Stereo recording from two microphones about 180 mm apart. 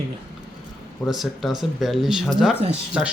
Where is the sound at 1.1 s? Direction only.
Centre (ahead or behind).